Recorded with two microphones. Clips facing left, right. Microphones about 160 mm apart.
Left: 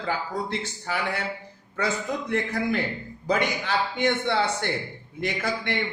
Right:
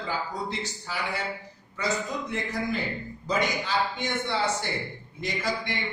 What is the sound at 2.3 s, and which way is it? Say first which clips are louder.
A man's voice: left 6 dB; 60° left (ahead or behind).